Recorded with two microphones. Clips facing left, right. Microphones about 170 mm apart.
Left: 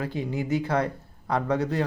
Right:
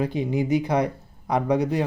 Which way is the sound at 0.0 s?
20° right (ahead or behind).